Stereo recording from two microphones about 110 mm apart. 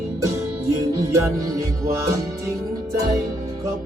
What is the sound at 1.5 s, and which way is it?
Music, 30° right (ahead or behind).